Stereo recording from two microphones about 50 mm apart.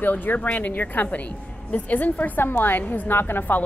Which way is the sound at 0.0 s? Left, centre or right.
Left.